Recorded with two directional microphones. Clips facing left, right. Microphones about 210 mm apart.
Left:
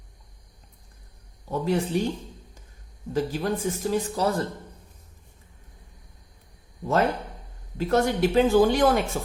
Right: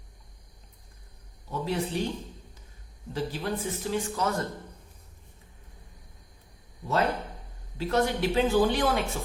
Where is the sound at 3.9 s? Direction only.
35° left (ahead or behind).